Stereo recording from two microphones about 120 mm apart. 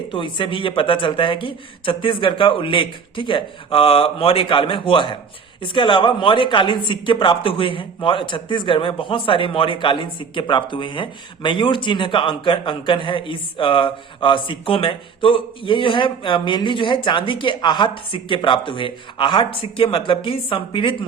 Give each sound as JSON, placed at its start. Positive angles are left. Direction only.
{"t": 0.1, "sound": "speech", "side_deg": 45}